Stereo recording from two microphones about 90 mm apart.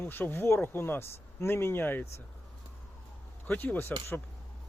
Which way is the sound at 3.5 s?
20° left (ahead or behind).